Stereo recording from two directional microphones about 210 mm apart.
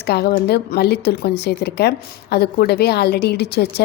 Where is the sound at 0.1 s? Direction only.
50° left (ahead or behind).